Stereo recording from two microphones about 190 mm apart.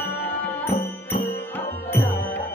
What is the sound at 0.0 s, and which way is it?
Music, 10° left (ahead or behind).